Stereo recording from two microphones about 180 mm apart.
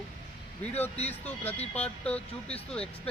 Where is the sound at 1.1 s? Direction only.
10° left (ahead or behind).